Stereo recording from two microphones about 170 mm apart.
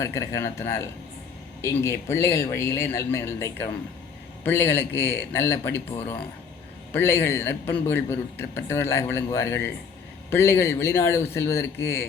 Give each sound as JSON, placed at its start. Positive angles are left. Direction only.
{"t": 0.0, "sound": "a man's voice", "side_deg": 15}